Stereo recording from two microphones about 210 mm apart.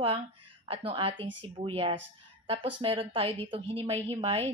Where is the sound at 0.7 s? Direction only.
25° right (ahead or behind).